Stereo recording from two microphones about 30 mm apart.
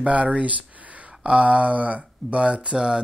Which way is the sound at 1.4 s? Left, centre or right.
Right.